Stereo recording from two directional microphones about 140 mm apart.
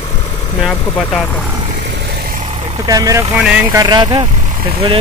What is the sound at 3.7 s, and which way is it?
Speech, 30° right (ahead or behind).